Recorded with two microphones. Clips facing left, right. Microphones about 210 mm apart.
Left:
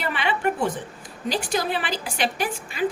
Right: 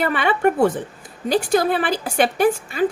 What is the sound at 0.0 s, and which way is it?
A woman's voice, 50° right (ahead or behind).